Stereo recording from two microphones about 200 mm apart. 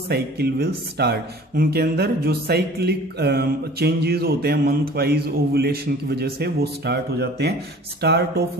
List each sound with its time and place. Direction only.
0.1 s speech: 55° right (ahead or behind)